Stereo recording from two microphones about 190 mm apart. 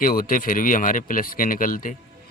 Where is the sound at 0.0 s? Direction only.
50° left (ahead or behind).